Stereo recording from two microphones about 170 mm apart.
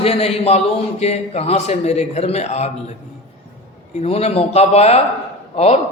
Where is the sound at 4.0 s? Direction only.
35° left (ahead or behind).